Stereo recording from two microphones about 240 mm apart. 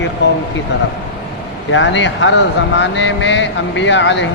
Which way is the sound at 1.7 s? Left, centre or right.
Left.